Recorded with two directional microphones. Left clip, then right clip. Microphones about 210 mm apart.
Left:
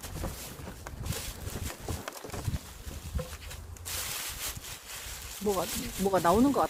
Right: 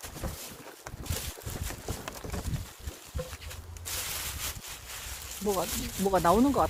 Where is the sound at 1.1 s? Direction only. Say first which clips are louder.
Right 1 dB; 35° right (ahead or behind).